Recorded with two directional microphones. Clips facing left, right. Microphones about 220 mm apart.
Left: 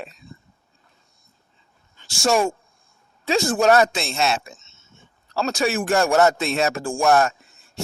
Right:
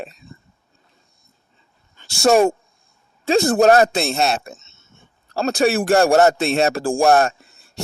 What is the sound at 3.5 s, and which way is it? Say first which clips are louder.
Speech: right 3 dB; 35° right (ahead or behind).